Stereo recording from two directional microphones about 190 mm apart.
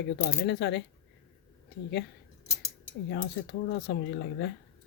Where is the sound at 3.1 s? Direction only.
65° left (ahead or behind).